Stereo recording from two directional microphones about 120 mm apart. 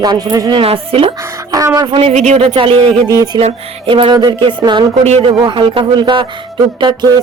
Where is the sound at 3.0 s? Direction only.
30° right (ahead or behind).